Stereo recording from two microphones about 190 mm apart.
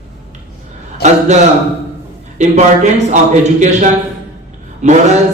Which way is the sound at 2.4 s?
40° right (ahead or behind).